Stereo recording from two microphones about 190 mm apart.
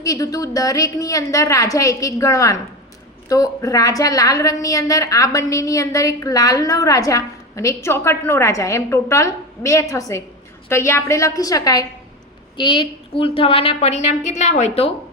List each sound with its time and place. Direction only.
0.0 s a woman's voice: 20° left (ahead or behind); by 14.9 s 35° left (ahead or behind)